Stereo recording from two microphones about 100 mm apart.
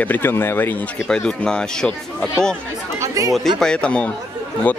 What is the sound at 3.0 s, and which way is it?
Chatter, 35° right (ahead or behind).